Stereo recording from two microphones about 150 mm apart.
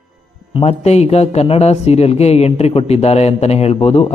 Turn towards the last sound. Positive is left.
turn(degrees=40)  # may be behind; listen again after turning